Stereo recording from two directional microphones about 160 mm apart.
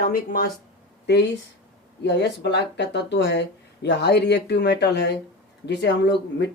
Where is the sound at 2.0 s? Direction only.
90° left.